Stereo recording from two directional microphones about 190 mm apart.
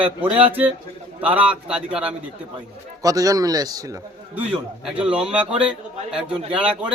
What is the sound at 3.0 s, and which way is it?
Speech, 20° right (ahead or behind).